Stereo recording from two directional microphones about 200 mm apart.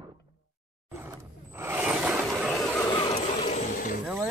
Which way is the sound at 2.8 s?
25° left (ahead or behind).